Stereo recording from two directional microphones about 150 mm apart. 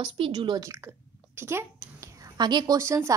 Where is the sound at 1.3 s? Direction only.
15° right (ahead or behind).